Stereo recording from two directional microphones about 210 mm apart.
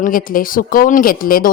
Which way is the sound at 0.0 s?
40° left (ahead or behind).